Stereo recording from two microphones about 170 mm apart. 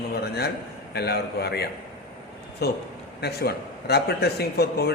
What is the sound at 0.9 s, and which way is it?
A man's voice, 70° left (ahead or behind).